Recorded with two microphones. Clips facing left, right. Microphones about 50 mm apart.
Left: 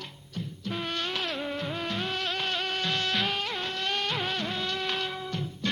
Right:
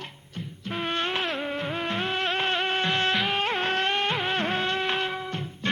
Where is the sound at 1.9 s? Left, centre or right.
Right.